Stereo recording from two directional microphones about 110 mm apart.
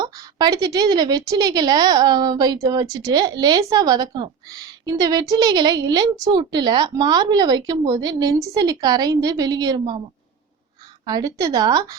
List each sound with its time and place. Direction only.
0.0 s a woman's voice: 35° right (ahead or behind)
11.0 s a woman's voice: 35° right (ahead or behind)